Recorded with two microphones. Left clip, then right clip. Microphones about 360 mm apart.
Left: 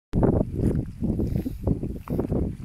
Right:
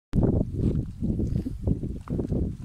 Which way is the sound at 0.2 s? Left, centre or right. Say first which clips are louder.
Left 4 dB; left.